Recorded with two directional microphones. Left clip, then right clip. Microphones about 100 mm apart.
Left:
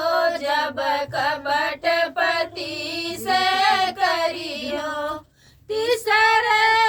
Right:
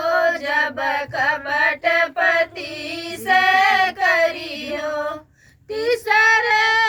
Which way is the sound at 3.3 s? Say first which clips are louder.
Right 4 dB; 35° left (ahead or behind).